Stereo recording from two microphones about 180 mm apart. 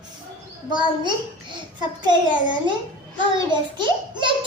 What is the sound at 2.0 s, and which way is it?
A child's voice, 25° right (ahead or behind).